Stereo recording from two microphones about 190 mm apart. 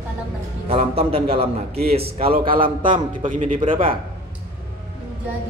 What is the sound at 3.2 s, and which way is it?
Speech, 40° right (ahead or behind).